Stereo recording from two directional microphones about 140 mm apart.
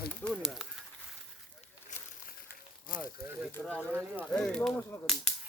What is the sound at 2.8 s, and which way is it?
Speech, 80° left.